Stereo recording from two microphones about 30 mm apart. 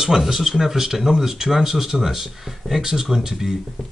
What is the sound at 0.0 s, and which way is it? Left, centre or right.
Speech, centre.